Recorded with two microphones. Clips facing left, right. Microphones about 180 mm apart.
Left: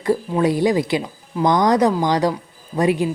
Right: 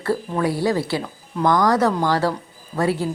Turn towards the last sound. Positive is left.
turn(degrees=15)  # may be behind; listen again after turning